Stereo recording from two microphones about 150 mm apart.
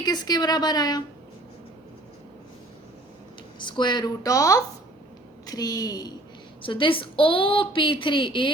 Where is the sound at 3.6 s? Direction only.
30° left (ahead or behind).